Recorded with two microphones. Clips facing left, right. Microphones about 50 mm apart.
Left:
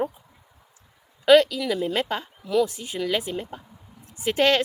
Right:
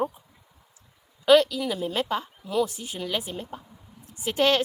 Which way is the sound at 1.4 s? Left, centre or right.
Left.